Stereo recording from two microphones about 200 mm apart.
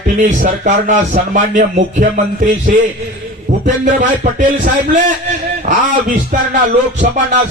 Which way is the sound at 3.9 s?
40° right (ahead or behind).